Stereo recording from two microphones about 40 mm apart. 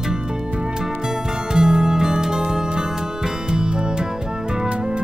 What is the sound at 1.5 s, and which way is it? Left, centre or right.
Music, centre.